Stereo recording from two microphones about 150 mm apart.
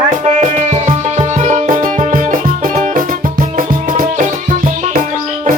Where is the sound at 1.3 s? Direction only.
55° right (ahead or behind).